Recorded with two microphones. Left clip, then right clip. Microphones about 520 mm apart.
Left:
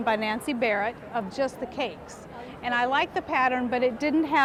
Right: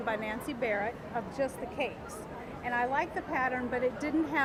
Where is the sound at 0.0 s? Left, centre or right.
Left.